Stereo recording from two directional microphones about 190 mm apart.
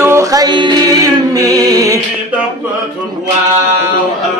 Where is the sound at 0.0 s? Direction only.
15° right (ahead or behind).